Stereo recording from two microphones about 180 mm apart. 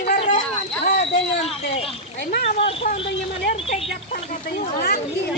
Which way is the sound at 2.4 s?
35° left (ahead or behind).